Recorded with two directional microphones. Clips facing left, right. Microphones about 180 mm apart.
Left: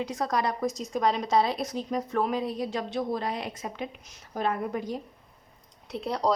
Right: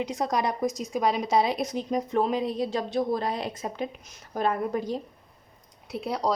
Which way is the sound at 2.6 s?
35° right (ahead or behind).